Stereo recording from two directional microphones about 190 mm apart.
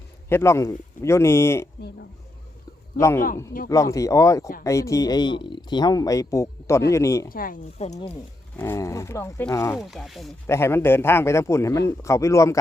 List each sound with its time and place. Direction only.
0.3 s a man's voice: 15° left (ahead or behind)
3.0 s a man's voice: 15° left (ahead or behind)
7.3 s speech: 50° left (ahead or behind)
8.5 s a man's voice: 15° left (ahead or behind)
9.7 s speech: centre (ahead or behind)
10.4 s a man's voice: 15° left (ahead or behind)